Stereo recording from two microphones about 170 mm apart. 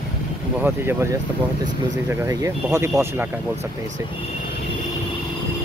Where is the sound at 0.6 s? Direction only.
15° right (ahead or behind).